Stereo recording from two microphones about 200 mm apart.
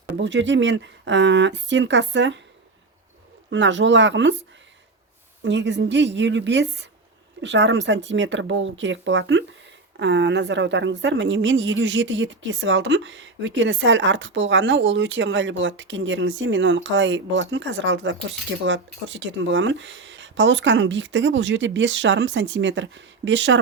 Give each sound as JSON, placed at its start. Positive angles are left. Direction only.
{"t": 0.2, "sound": "speech", "side_deg": -65}
{"t": 3.5, "sound": "a woman's voice", "side_deg": -65}